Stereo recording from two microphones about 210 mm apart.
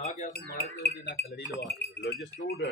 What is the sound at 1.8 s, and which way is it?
Speech, 50° left (ahead or behind).